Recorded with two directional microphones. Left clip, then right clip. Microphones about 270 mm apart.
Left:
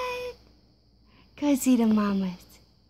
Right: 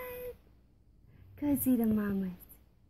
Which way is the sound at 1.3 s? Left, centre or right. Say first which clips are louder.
Left 7 dB; left.